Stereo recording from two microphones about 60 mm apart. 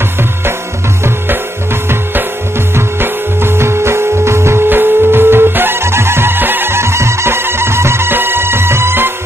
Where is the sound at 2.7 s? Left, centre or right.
Right.